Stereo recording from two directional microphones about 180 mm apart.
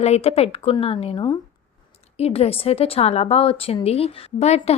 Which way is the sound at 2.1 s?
35° left (ahead or behind).